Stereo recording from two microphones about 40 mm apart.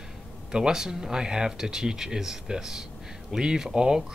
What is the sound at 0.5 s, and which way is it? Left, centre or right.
Speech, centre.